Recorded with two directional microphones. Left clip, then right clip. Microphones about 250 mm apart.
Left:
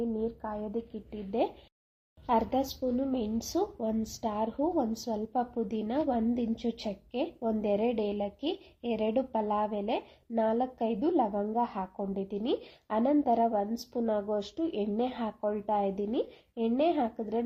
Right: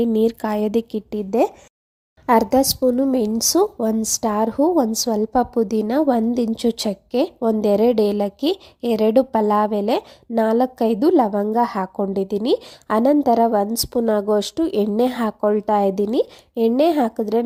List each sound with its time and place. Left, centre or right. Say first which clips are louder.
0.0 s a woman's voice: right 15 dB; right